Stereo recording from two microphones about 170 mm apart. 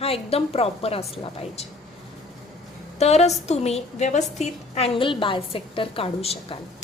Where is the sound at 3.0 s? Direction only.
40° left (ahead or behind).